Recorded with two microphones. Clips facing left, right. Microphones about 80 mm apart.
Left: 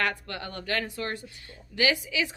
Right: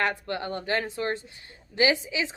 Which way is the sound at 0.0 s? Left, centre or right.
Right.